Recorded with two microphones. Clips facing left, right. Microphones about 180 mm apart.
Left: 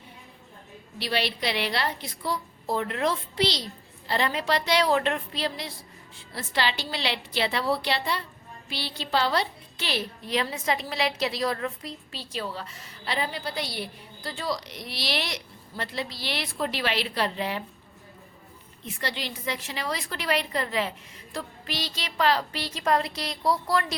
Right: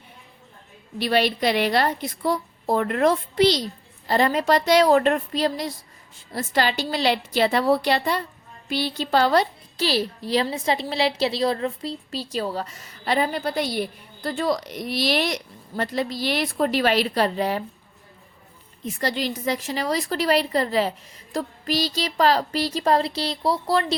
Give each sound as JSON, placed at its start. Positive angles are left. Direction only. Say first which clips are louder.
{"t": 0.9, "sound": "a woman's voice", "louder": "right 7 dB", "side_deg": -50}
{"t": 18.9, "sound": "speech", "louder": "right 8 dB", "side_deg": -40}